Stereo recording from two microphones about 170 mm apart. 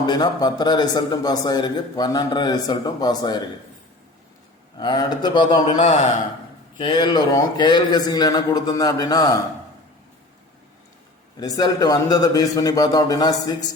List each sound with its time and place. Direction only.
0.0 s speech: 25° left (ahead or behind)
4.8 s speech: 25° left (ahead or behind)
5.6 s a man's voice: 45° left (ahead or behind)
6.7 s speech: 30° left (ahead or behind)
11.3 s speech: 20° left (ahead or behind)